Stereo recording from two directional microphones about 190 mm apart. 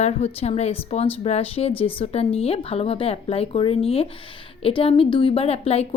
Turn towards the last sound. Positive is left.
turn(degrees=35)  # may be behind; listen again after turning